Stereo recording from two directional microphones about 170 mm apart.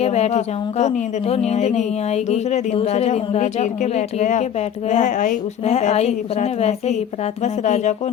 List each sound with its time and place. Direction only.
0.0 s a woman's voice: 40° left (ahead or behind)